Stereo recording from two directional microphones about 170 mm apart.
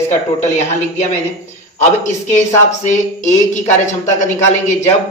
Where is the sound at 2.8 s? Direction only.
45° left (ahead or behind).